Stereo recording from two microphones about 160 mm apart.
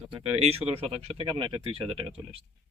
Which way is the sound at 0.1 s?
40° right (ahead or behind).